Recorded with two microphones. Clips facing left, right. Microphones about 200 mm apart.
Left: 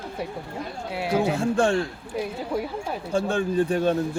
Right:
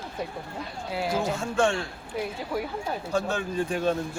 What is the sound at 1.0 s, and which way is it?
Speech, 65° left (ahead or behind).